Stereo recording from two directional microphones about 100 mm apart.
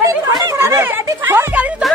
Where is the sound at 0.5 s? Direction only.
25° right (ahead or behind).